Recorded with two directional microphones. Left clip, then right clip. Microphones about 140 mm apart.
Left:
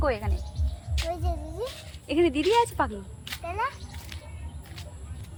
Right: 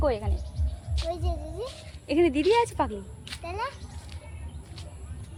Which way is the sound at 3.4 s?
10° right (ahead or behind).